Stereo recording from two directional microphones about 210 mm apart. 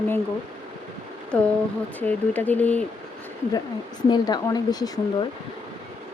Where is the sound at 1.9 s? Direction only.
10° left (ahead or behind).